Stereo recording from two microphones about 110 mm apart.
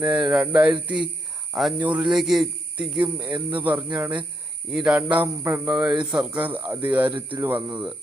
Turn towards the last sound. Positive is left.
turn(degrees=-15)  # may be behind; listen again after turning